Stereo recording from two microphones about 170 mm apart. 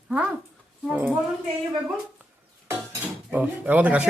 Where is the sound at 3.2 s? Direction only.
10° right (ahead or behind).